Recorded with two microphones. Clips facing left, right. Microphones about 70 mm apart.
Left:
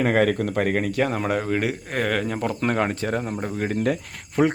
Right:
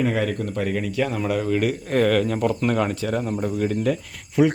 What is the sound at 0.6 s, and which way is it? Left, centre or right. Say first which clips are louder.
Speech: even; left.